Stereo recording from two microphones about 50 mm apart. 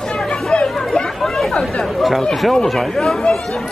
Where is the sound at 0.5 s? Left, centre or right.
Centre.